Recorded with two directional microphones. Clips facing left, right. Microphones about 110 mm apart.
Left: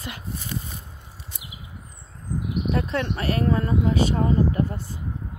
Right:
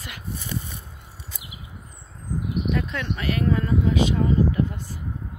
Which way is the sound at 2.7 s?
35° left (ahead or behind).